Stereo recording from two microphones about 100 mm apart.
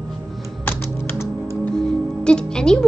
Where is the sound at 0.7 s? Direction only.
20° left (ahead or behind).